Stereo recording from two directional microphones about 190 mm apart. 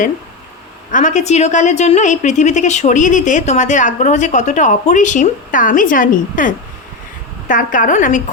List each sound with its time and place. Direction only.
0.9 s a woman's voice: 40° left (ahead or behind)